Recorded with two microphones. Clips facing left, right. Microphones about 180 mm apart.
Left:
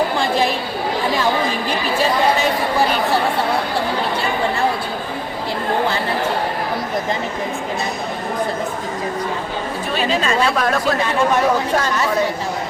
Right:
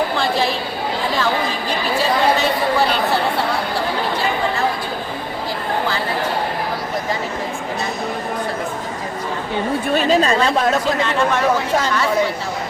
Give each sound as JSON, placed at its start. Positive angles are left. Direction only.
{"t": 9.9, "sound": "chatter", "side_deg": -40}